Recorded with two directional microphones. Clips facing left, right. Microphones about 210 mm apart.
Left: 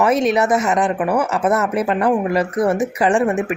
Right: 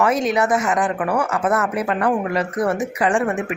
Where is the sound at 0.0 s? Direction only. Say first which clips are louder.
Left 3 dB; 25° left (ahead or behind).